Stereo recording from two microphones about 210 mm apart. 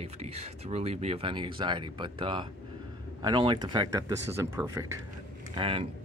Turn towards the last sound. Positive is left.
turn(degrees=-25)  # may be behind; listen again after turning